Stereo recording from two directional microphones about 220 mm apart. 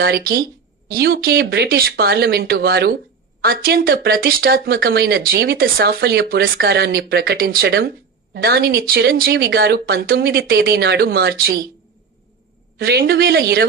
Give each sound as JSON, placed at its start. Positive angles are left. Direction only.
{"t": 0.0, "sound": "speech", "side_deg": -40}
{"t": 12.7, "sound": "speech", "side_deg": -45}